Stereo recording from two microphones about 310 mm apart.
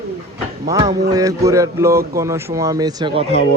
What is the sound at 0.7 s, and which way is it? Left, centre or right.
A man's voice, centre.